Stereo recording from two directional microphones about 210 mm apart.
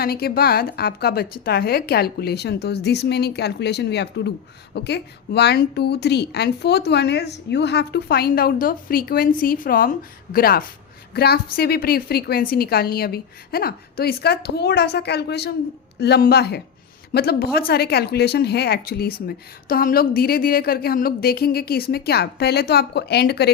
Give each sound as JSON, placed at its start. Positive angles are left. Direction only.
{"t": 0.0, "sound": "speech", "side_deg": 45}